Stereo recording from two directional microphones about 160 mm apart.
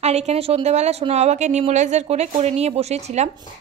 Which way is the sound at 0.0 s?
40° right (ahead or behind).